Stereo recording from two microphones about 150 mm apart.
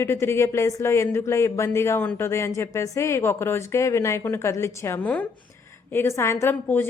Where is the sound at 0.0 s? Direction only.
15° left (ahead or behind).